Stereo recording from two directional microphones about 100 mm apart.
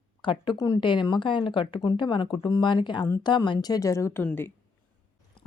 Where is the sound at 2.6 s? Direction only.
50° left (ahead or behind); by 4.5 s 20° left (ahead or behind).